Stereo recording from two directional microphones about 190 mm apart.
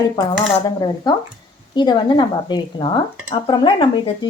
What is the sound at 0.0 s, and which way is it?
A woman's voice, 20° left (ahead or behind).